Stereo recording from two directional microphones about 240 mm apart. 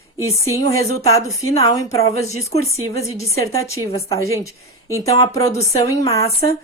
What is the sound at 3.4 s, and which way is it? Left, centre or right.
Speech, centre.